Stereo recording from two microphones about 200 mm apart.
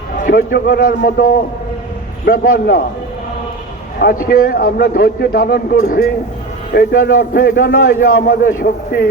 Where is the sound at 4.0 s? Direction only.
50° left (ahead or behind).